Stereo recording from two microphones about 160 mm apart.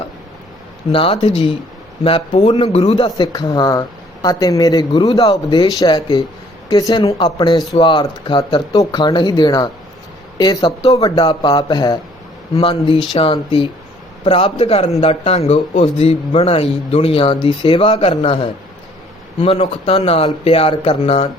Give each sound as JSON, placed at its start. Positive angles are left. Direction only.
{"t": 0.9, "sound": "speech", "side_deg": 35}